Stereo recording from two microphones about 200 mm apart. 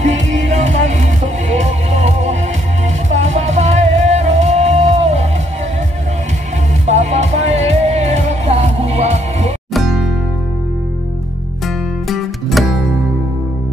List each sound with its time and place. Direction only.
0.5 s music: 35° right (ahead or behind)
6.9 s music: 35° right (ahead or behind)
9.8 s music: centre (ahead or behind)
11.6 s music: centre (ahead or behind)